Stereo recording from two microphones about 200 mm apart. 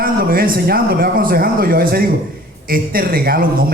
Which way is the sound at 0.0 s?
45° right (ahead or behind).